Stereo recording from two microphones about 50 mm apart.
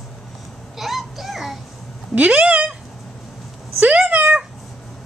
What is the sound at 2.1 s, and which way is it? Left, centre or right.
Speech, right.